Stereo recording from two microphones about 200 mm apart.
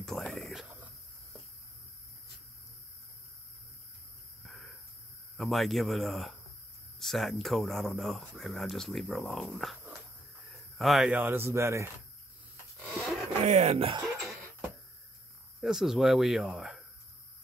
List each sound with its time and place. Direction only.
0.0 s whispering: centre (ahead or behind)
4.5 s a sound: centre (ahead or behind)
5.4 s speech: centre (ahead or behind)
12.8 s roaring cats: centre (ahead or behind)
13.5 s speech: 35° right (ahead or behind)
15.6 s speech: centre (ahead or behind)